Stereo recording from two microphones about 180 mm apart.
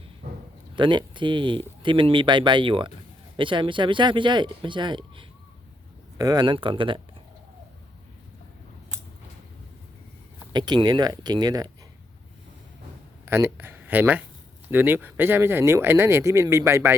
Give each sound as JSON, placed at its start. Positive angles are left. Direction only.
{"t": 0.8, "sound": "speech", "side_deg": -25}
{"t": 10.5, "sound": "speech", "side_deg": -25}
{"t": 13.2, "sound": "speech", "side_deg": -15}